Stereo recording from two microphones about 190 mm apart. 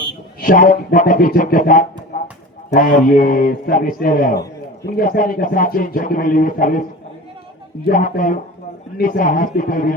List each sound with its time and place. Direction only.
0.4 s a man's voice: 45° left (ahead or behind)
7.9 s a man's voice: 45° left (ahead or behind)